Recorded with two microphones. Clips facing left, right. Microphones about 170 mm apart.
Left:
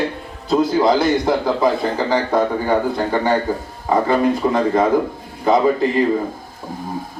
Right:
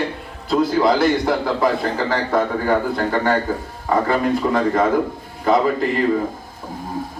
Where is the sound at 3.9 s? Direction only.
15° left (ahead or behind).